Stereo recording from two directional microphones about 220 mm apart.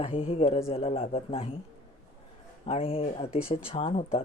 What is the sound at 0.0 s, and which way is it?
Speech, 25° left (ahead or behind).